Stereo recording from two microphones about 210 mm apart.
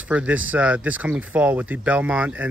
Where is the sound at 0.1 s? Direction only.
5° right (ahead or behind).